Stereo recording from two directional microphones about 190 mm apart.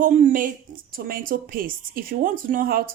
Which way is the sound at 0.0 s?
40° right (ahead or behind).